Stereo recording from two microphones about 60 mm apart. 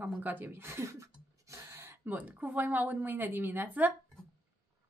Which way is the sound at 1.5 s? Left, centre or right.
Right.